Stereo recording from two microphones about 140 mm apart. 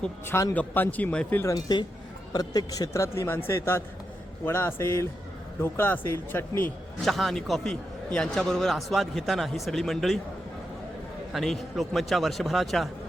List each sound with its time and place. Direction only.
0.0 s speech: 20° left (ahead or behind)
1.5 s a man's voice: 30° left (ahead or behind)
7.0 s a man's voice: centre (ahead or behind)
11.3 s a man's voice: centre (ahead or behind)